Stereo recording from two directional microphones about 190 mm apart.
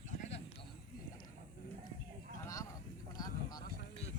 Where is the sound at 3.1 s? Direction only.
20° left (ahead or behind).